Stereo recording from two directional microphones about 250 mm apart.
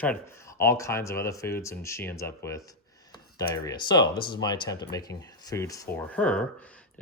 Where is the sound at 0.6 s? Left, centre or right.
Centre.